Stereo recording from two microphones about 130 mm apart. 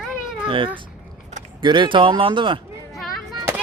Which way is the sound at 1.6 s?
35° right (ahead or behind).